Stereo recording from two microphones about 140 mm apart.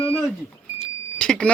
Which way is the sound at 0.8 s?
5° left (ahead or behind).